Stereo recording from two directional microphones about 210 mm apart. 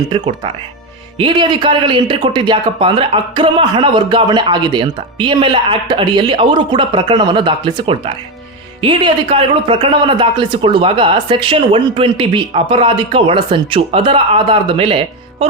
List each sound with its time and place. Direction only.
0.1 s speech: 25° right (ahead or behind)